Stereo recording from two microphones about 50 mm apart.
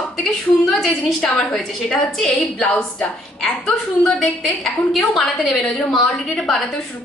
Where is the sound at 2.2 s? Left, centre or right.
Centre.